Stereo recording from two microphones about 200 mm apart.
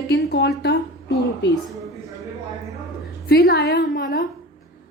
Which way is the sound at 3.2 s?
50° left (ahead or behind).